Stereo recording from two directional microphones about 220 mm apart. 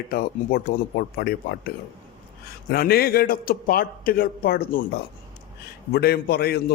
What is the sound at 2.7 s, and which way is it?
A man's voice, 45° left (ahead or behind).